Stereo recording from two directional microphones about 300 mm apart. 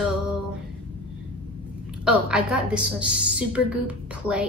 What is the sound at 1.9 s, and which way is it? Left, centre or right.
A woman's voice, centre.